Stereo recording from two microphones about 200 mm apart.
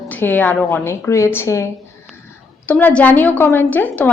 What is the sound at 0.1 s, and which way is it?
A woman's voice, 10° left (ahead or behind).